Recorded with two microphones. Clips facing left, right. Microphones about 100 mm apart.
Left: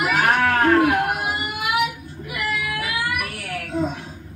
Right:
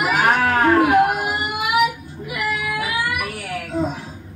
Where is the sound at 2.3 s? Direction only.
25° right (ahead or behind).